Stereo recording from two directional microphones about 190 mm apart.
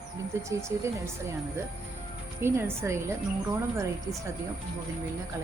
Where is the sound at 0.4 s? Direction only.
15° right (ahead or behind).